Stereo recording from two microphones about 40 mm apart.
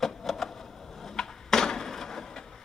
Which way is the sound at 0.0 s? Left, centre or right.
Centre.